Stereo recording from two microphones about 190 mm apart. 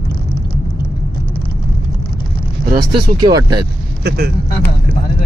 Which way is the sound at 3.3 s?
20° right (ahead or behind).